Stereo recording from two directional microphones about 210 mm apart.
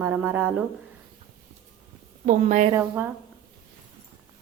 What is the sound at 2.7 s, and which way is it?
Speech, 10° right (ahead or behind).